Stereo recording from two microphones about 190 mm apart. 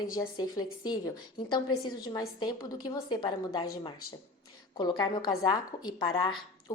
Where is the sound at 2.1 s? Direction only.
20° left (ahead or behind).